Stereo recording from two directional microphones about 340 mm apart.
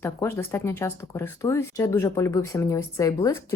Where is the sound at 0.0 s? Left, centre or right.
Centre.